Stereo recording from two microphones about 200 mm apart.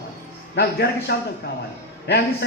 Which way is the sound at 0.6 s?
55° left (ahead or behind).